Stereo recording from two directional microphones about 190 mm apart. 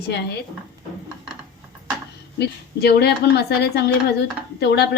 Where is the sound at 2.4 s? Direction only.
55° left (ahead or behind).